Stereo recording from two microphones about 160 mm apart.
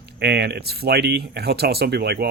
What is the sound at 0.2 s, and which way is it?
Speech, 90° right.